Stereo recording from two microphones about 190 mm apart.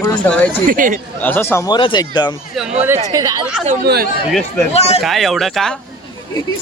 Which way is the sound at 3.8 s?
55° right (ahead or behind).